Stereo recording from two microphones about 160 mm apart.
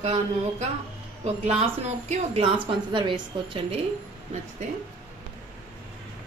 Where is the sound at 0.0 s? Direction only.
40° right (ahead or behind).